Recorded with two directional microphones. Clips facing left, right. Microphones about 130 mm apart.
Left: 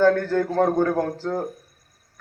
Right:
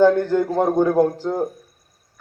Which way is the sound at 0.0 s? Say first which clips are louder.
Right 3 dB; 15° right (ahead or behind).